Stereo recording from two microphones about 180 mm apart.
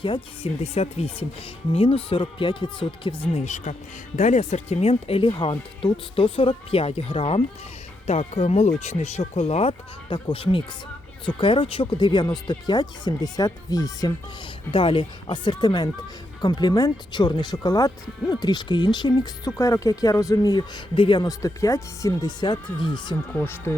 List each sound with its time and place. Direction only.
0.0 s speech: 30° left (ahead or behind)
23.3 s speech: 10° left (ahead or behind)